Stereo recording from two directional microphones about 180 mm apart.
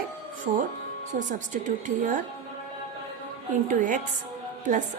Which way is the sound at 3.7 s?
45° right (ahead or behind).